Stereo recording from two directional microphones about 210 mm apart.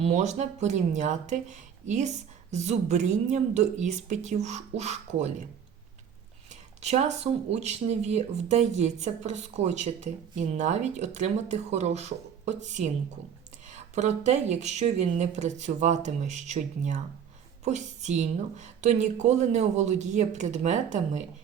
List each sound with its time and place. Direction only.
0.0 s speech: 35° right (ahead or behind)
6.5 s a woman's voice: 30° right (ahead or behind)